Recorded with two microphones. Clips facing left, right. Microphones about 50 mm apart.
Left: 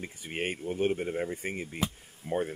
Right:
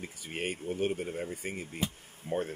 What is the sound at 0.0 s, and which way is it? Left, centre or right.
Speech, left.